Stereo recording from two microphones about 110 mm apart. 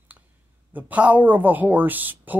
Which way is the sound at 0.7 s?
15° right (ahead or behind).